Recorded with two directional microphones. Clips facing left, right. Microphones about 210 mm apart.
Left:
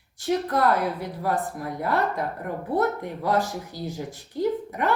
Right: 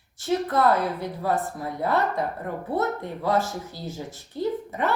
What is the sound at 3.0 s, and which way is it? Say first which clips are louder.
Speech: even; 15° left (ahead or behind).